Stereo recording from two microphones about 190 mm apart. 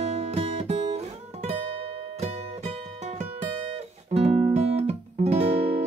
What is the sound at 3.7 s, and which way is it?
Music, 30° right (ahead or behind).